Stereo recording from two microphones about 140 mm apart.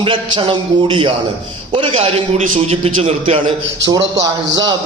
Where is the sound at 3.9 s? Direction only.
25° right (ahead or behind).